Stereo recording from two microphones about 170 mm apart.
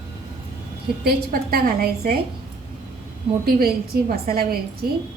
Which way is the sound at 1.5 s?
65° right (ahead or behind).